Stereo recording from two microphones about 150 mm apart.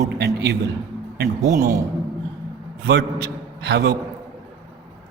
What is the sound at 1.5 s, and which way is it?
Speech, 70° right (ahead or behind).